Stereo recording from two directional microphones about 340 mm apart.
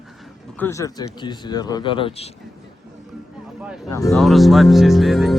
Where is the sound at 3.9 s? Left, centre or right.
Centre.